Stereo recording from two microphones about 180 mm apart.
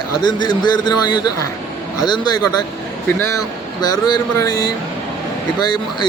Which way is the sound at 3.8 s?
25° left (ahead or behind).